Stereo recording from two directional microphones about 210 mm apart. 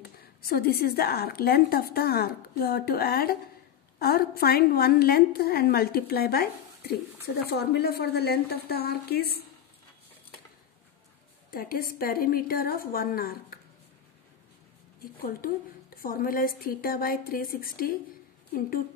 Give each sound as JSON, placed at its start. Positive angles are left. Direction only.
{"t": 0.4, "sound": "a woman's voice", "side_deg": 45}
{"t": 11.5, "sound": "a woman's voice", "side_deg": 45}
{"t": 15.2, "sound": "a woman's voice", "side_deg": 45}